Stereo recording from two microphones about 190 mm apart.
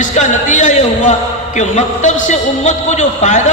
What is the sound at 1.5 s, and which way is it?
A man's voice, 40° left (ahead or behind).